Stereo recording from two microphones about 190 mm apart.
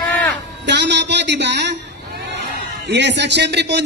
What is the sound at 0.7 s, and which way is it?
A woman's voice, 65° right (ahead or behind).